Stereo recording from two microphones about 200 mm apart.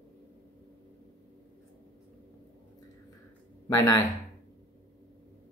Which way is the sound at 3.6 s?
15° left (ahead or behind).